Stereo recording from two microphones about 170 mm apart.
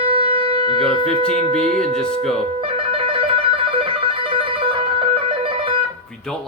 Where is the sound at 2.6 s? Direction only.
30° right (ahead or behind).